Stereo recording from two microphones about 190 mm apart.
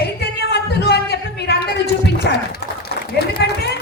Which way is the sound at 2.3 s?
60° left (ahead or behind).